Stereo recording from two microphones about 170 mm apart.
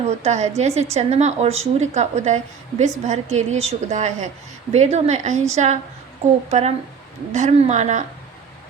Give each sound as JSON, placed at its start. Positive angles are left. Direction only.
{"t": 0.2, "sound": "a woman's voice", "side_deg": -40}